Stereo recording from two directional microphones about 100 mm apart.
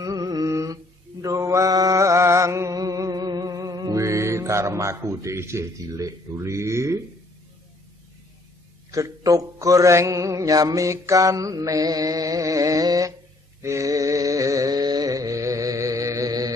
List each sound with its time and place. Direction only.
0.0 s music: 35° right (ahead or behind)
1.2 s mantra: 30° right (ahead or behind)
8.9 s mantra: 35° right (ahead or behind)
13.6 s music: 30° right (ahead or behind)